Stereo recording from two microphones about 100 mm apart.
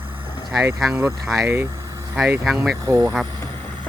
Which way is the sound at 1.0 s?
25° right (ahead or behind).